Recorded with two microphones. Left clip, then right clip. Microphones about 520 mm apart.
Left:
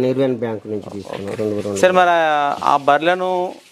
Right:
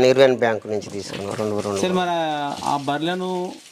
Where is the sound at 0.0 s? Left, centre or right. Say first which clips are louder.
Right 4 dB; right.